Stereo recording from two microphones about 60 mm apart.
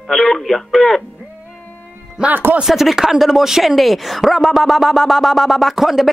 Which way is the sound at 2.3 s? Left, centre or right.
Right.